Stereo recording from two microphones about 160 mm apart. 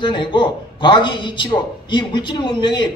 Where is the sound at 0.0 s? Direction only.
30° left (ahead or behind).